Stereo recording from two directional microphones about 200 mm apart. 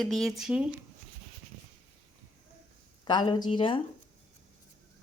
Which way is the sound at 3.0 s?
20° left (ahead or behind).